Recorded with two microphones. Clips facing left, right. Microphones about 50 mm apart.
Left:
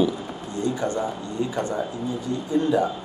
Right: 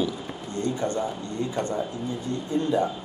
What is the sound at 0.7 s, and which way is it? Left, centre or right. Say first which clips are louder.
Speech: left 1 dB; left.